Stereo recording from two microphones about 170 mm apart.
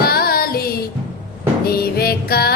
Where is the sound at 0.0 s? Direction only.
65° left (ahead or behind).